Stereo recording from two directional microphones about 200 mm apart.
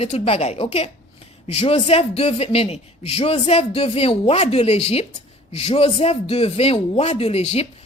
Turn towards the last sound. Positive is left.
turn(degrees=30)  # may be behind; listen again after turning